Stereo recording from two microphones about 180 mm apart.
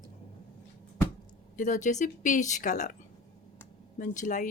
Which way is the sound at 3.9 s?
45° left (ahead or behind).